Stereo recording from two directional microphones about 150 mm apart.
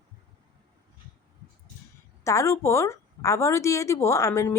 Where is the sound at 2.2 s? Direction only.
20° left (ahead or behind).